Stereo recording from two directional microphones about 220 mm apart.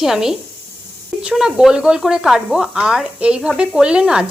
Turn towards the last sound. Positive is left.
turn(degrees=-5)  # may be behind; listen again after turning